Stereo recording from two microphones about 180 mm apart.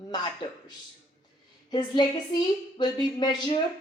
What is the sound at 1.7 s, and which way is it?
A woman's voice, 25° left (ahead or behind).